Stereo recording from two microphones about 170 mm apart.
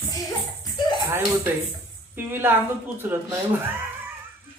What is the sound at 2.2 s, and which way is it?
A woman's voice, 10° right (ahead or behind).